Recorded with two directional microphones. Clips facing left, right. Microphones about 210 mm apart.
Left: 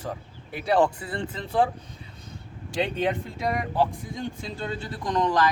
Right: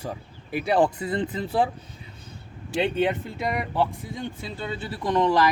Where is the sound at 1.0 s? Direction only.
20° right (ahead or behind).